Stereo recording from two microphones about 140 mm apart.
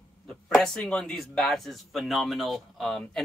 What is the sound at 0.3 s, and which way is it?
Speech, 5° left (ahead or behind).